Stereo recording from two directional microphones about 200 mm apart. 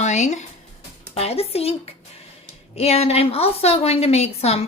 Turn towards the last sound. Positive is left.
turn(degrees=30)  # may be behind; listen again after turning